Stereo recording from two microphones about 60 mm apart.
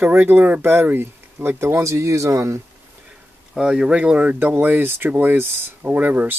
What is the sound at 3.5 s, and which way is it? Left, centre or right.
Speech, centre.